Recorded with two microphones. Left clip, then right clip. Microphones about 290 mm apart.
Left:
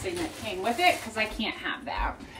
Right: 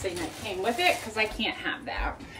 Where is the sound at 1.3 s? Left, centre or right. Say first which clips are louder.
Right 1 dB; centre.